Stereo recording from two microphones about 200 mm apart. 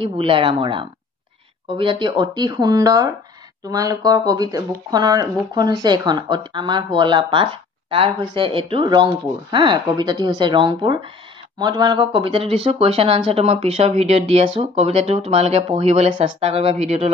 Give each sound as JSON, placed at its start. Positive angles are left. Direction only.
{"t": 0.0, "sound": "speech", "side_deg": -25}